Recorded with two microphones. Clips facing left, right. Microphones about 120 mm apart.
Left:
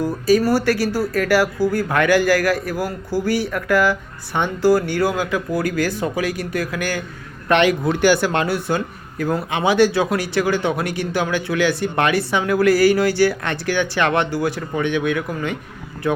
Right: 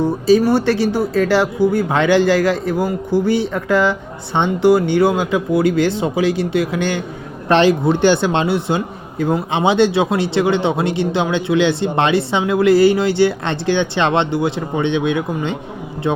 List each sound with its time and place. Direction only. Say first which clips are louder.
0.0 s speech: right 3 dB; 25° right (ahead or behind)